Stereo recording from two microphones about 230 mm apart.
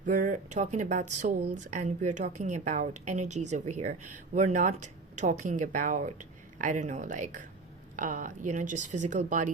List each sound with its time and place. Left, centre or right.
0.0 s speech: right